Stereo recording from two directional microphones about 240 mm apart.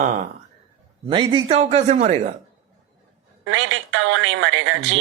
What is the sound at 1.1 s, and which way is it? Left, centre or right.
A man's voice, centre.